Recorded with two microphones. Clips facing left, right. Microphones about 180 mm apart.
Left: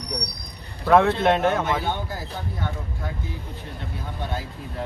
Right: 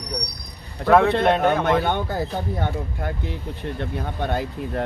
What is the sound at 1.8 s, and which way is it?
Speech, 65° right (ahead or behind).